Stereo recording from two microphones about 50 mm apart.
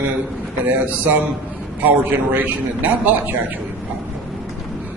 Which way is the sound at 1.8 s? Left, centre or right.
Right.